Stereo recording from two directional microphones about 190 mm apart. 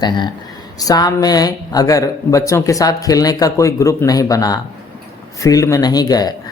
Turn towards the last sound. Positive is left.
turn(degrees=20)  # may be behind; listen again after turning